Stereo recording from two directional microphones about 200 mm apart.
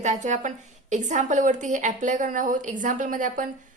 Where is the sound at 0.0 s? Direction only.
35° right (ahead or behind).